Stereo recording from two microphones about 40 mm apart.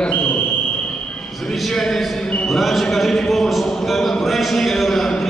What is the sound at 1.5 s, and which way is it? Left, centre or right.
Speech, centre.